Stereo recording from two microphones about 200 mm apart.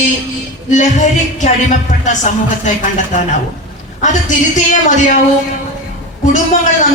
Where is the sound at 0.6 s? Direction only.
40° left (ahead or behind).